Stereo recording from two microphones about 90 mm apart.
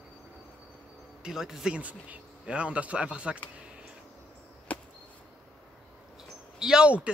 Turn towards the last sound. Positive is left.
turn(degrees=-10)  # may be behind; listen again after turning